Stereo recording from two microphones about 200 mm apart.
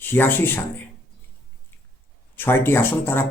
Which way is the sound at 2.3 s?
10° left (ahead or behind).